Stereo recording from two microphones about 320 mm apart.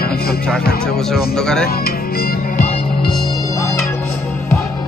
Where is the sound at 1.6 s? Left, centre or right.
Left.